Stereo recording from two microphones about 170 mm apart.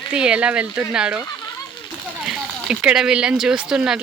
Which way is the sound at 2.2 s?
5° right (ahead or behind).